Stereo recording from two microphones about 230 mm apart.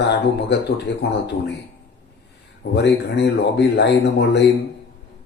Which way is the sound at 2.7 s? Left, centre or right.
Left.